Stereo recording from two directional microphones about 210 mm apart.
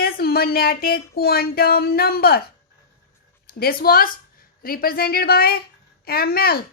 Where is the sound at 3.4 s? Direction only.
45° left (ahead or behind).